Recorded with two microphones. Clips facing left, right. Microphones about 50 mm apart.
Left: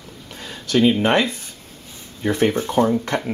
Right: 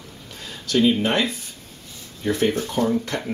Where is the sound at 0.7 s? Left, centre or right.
Left.